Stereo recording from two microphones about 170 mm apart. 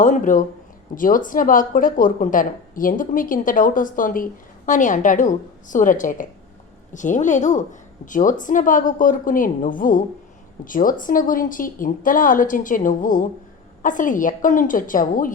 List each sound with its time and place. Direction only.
0.0 s speech: 50° left (ahead or behind)